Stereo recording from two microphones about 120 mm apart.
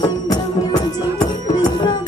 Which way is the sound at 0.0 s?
35° left (ahead or behind).